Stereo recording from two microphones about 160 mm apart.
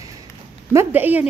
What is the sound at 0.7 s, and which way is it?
Speech, 10° right (ahead or behind).